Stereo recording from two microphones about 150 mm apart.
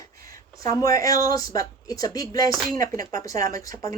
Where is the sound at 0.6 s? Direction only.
20° left (ahead or behind).